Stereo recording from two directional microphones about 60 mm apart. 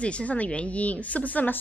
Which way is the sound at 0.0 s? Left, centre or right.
Left.